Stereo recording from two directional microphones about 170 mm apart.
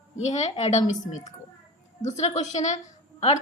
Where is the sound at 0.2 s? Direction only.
45° left (ahead or behind).